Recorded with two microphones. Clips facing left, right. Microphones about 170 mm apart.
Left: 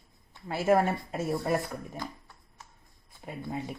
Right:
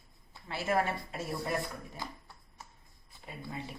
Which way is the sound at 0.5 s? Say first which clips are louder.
Left 7 dB; 45° left (ahead or behind).